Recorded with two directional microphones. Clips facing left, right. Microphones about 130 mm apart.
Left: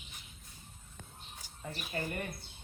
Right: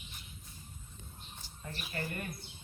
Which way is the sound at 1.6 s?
20° left (ahead or behind).